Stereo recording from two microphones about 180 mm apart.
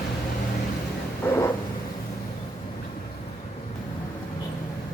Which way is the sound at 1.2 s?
15° left (ahead or behind).